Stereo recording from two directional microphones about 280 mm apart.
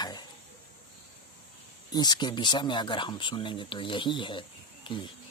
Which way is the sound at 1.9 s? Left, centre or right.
Centre.